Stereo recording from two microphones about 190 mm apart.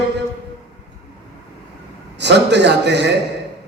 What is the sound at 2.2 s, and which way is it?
Speech, 65° right (ahead or behind).